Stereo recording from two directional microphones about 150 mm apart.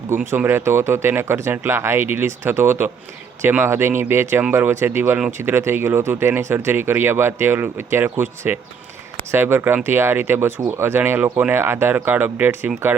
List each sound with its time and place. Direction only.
0.3 s speech: 15° right (ahead or behind)